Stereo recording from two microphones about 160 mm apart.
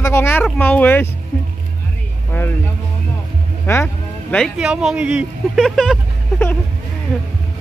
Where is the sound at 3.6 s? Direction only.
15° left (ahead or behind).